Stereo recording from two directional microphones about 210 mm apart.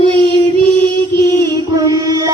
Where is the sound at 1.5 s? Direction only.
15° right (ahead or behind).